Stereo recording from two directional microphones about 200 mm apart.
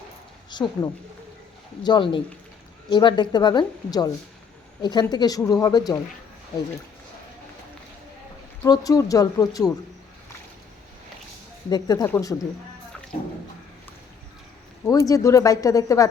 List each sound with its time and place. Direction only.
0.5 s a woman's voice: 20° left (ahead or behind)
8.6 s speech: 20° left (ahead or behind)
11.7 s speech: 20° left (ahead or behind)
14.8 s speech: 15° left (ahead or behind)